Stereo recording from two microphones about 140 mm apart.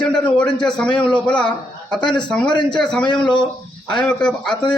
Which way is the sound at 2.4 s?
35° left (ahead or behind).